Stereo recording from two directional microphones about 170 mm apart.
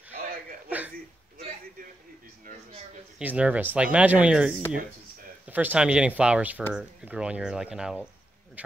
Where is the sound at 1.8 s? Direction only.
55° right (ahead or behind).